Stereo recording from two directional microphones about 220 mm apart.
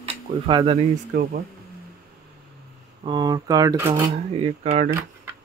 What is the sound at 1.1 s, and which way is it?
Speech, 40° right (ahead or behind).